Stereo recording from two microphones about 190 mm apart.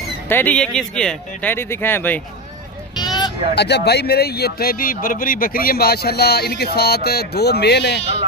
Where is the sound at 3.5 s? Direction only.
60° left (ahead or behind).